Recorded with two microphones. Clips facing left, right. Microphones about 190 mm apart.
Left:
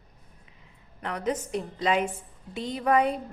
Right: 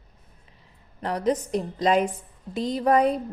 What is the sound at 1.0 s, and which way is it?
A woman's voice, 35° right (ahead or behind).